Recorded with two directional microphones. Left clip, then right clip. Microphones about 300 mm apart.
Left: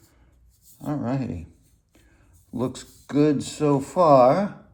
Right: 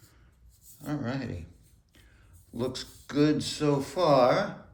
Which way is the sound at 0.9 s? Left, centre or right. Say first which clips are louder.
Left 6 dB; centre.